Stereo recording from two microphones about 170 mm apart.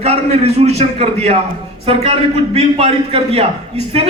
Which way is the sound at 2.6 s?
35° right (ahead or behind).